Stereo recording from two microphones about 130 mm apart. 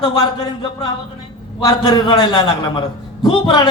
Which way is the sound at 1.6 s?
35° left (ahead or behind).